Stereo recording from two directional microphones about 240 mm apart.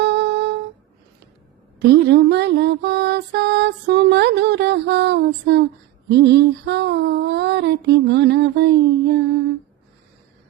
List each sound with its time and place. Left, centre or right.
0.0 s humming: right
1.8 s music: right
6.1 s female singing: right